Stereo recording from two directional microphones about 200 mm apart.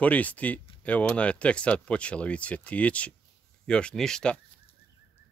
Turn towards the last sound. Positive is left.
turn(degrees=5)  # may be behind; listen again after turning